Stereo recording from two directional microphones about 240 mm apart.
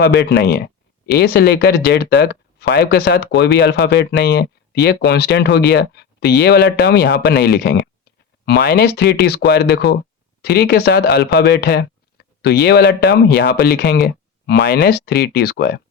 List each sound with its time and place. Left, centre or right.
0.0 s speech: left